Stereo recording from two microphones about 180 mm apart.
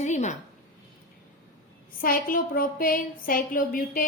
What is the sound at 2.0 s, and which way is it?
A woman's voice, 50° left (ahead or behind).